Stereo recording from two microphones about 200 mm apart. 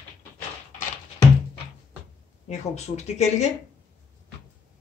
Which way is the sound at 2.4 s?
35° left (ahead or behind).